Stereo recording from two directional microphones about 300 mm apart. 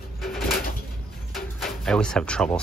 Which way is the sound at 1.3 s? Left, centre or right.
Centre.